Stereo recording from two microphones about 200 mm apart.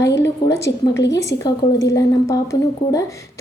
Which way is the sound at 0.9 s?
60° left (ahead or behind).